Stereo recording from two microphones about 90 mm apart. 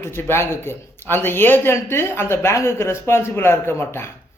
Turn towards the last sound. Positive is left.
turn(degrees=30)  # may be behind; listen again after turning